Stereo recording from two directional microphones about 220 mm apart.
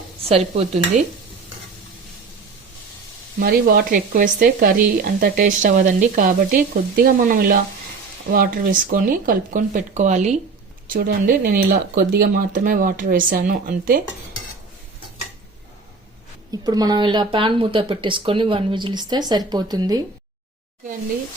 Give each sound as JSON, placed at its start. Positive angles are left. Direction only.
{"t": 0.3, "sound": "speech", "side_deg": -25}
{"t": 3.4, "sound": "speech", "side_deg": -45}
{"t": 16.5, "sound": "speech", "side_deg": -15}